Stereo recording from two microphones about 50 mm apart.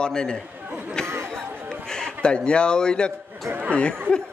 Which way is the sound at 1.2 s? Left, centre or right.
Centre.